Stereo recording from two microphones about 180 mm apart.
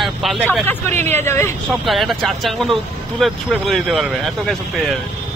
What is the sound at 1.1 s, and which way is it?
Speech, 15° left (ahead or behind).